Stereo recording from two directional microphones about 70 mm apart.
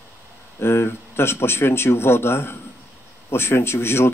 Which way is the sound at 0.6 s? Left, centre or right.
Left.